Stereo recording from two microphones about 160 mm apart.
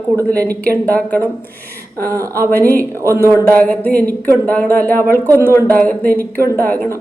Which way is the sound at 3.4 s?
10° left (ahead or behind).